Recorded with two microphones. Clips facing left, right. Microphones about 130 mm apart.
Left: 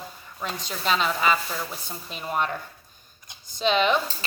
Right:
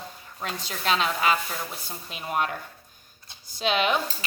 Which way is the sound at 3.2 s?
15° left (ahead or behind).